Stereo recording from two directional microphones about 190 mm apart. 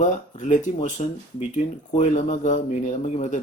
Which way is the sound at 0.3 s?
40° left (ahead or behind).